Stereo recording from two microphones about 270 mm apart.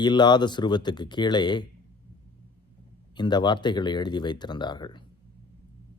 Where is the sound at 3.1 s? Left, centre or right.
Centre.